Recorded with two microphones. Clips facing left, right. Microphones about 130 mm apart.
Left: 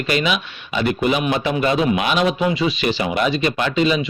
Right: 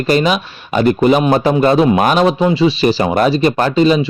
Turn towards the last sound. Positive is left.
turn(degrees=-40)  # may be behind; listen again after turning